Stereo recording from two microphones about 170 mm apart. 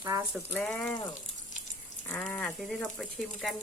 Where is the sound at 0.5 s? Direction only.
5° left (ahead or behind).